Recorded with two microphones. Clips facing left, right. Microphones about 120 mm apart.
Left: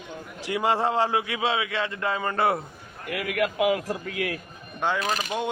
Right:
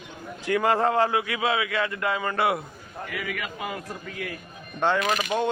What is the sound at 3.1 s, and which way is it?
A man's voice, 80° left.